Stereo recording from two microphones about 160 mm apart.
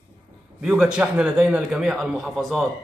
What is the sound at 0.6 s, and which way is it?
A man's voice, 5° right (ahead or behind).